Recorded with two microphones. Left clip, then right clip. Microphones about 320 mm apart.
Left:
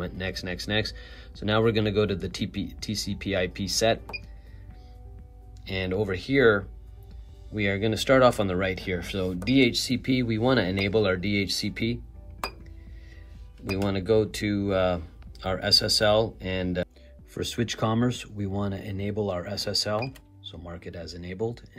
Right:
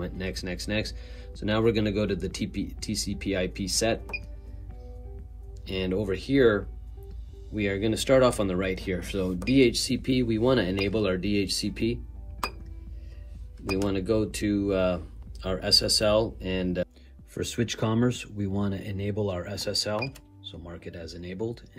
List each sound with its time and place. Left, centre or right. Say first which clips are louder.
0.0 s speech: left 2 dB; left
5.7 s speech: left 1 dB; left
13.8 s speech: left 5 dB; left
20.5 s speech: left 2 dB; left